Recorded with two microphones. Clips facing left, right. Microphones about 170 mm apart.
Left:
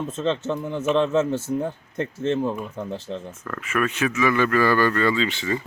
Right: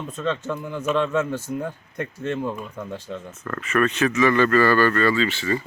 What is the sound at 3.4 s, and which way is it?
Speech, 5° left (ahead or behind).